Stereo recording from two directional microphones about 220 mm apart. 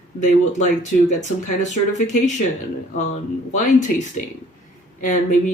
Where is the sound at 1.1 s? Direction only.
35° left (ahead or behind).